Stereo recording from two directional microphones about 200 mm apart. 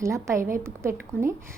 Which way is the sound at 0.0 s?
15° right (ahead or behind).